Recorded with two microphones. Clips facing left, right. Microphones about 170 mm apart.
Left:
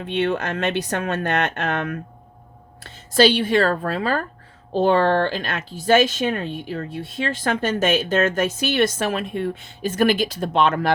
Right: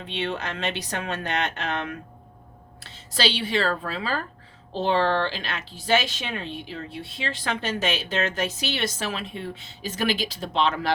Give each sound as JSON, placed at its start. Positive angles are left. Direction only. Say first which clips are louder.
{"t": 0.0, "sound": "speech", "louder": "left 7 dB", "side_deg": 50}